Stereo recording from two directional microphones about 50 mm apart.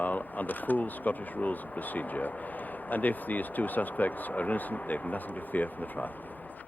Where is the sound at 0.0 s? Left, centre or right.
Left.